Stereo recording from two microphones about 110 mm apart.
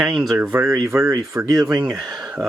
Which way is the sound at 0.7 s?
30° right (ahead or behind).